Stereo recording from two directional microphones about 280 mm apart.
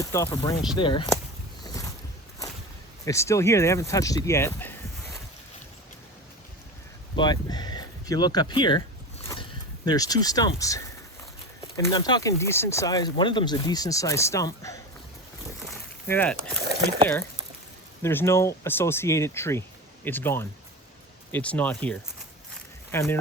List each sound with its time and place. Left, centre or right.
0.0 s speech: centre
1.6 s vehicle: centre
3.1 s speech: centre
7.2 s speech: centre
15.6 s a sound: centre
18.0 s speech: centre